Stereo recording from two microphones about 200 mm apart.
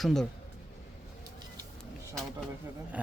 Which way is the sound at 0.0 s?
Centre (ahead or behind).